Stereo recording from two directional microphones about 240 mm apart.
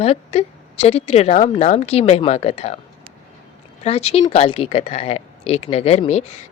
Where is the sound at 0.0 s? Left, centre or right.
Left.